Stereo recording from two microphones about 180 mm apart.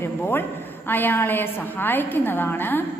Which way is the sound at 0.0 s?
10° left (ahead or behind).